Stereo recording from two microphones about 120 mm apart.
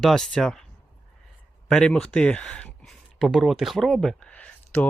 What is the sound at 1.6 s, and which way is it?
Speech, 5° left (ahead or behind).